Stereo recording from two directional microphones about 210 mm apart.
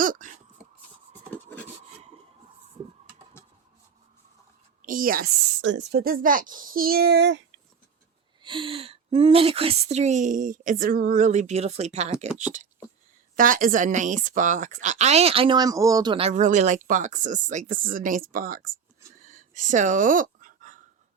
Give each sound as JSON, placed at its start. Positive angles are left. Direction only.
{"t": 0.0, "sound": "a sound", "side_deg": -40}
{"t": 1.3, "sound": "rub", "side_deg": 5}
{"t": 4.8, "sound": "a woman's voice", "side_deg": -40}
{"t": 5.6, "sound": "speech", "side_deg": -55}
{"t": 8.4, "sound": "speech", "side_deg": -25}
{"t": 19.2, "sound": "a sound", "side_deg": -40}